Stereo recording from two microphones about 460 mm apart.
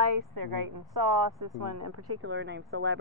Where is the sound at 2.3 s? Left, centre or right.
Right.